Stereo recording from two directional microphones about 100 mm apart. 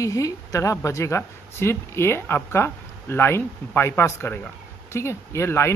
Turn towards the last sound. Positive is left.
turn(degrees=25)  # may be behind; listen again after turning